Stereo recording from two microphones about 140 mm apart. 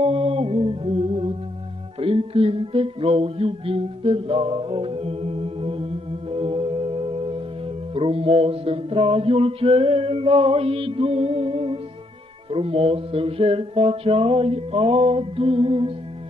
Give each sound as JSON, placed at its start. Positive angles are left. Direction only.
{"t": 0.0, "sound": "music", "side_deg": -40}